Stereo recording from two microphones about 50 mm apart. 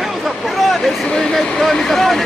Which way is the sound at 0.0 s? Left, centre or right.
Centre.